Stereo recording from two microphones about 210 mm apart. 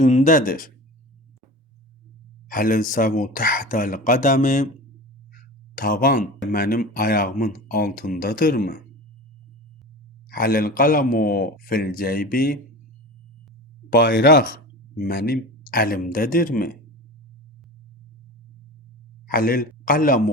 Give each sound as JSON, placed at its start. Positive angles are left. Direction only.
{"t": 0.0, "sound": "speech", "side_deg": 35}
{"t": 2.5, "sound": "speech", "side_deg": 40}
{"t": 5.7, "sound": "speech", "side_deg": 40}
{"t": 10.2, "sound": "speech", "side_deg": 45}
{"t": 13.9, "sound": "speech", "side_deg": 45}
{"t": 19.3, "sound": "speech", "side_deg": 45}